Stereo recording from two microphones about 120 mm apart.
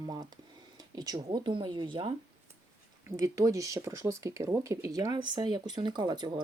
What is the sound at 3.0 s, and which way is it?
Speech, 25° right (ahead or behind).